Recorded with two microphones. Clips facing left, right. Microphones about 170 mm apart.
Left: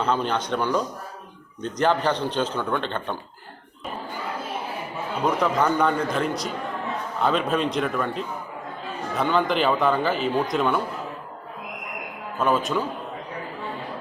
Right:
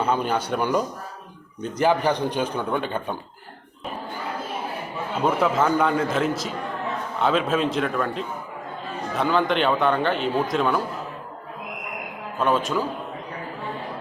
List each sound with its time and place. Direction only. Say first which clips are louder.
0.0 s speech: right 1 dB; 10° right (ahead or behind)
5.2 s speech: right 1 dB; 5° right (ahead or behind)
12.4 s speech: even; centre (ahead or behind)